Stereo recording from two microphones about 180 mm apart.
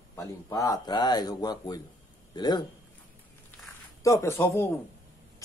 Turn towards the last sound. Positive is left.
turn(degrees=15)  # may be behind; listen again after turning